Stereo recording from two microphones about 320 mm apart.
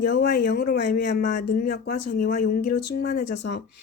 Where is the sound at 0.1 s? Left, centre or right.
Left.